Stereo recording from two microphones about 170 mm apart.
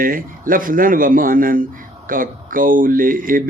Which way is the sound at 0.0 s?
55° right (ahead or behind).